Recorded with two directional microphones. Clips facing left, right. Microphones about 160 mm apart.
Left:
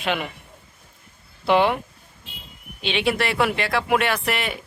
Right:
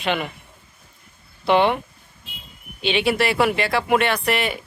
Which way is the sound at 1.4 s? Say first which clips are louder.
Right 1 dB; centre (ahead or behind).